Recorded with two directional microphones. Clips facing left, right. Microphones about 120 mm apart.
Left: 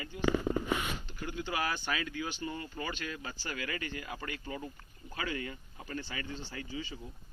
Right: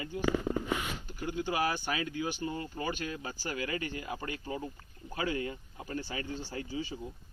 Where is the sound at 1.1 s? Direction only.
10° right (ahead or behind).